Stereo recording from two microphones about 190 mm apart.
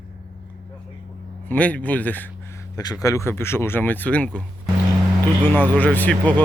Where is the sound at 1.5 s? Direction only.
10° left (ahead or behind).